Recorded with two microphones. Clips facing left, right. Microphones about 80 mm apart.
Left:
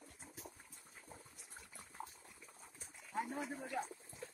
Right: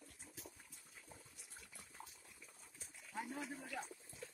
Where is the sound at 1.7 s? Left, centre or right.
Left.